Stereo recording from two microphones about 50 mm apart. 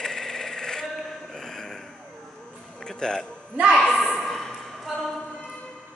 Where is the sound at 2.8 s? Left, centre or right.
Centre.